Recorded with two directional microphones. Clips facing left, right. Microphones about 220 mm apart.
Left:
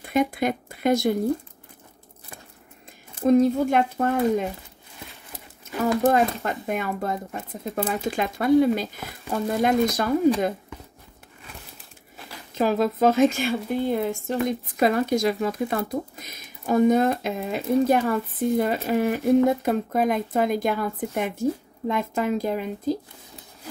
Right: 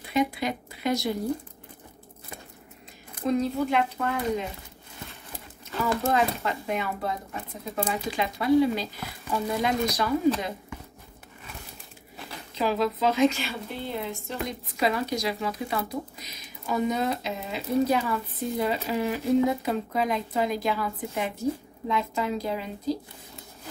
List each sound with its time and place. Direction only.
0.0 s speech: 50° left (ahead or behind)
3.3 s speech: 50° left (ahead or behind)
5.7 s a sound: 15° left (ahead or behind)
6.1 s speech: 50° left (ahead or behind)
12.5 s speech: 50° left (ahead or behind)